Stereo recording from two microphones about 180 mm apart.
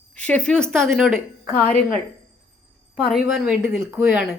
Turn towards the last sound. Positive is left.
turn(degrees=-10)  # may be behind; listen again after turning